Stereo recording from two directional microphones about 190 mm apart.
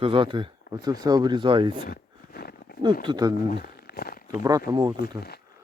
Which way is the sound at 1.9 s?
50° left (ahead or behind).